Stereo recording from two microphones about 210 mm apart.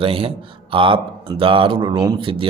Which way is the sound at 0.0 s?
25° right (ahead or behind).